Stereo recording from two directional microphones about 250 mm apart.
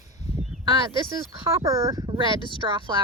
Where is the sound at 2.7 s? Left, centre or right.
Centre.